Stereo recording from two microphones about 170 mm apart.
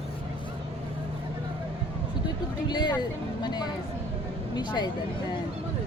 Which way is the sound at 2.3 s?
25° left (ahead or behind).